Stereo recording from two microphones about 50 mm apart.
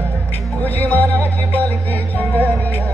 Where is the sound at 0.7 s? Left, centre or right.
Left.